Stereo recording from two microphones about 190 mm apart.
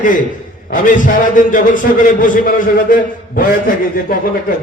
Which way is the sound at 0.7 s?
45° left (ahead or behind).